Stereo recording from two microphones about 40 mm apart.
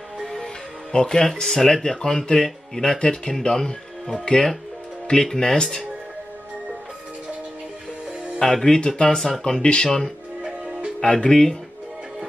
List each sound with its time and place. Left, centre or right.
0.2 s music: centre
0.9 s speech: centre
8.4 s speech: centre
11.0 s speech: centre